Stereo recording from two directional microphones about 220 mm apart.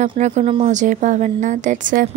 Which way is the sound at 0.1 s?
30° right (ahead or behind).